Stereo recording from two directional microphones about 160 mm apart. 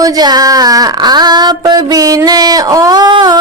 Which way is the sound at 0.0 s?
25° right (ahead or behind).